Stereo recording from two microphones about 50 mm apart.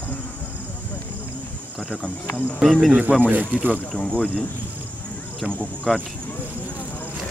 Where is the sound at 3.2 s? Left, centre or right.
Right.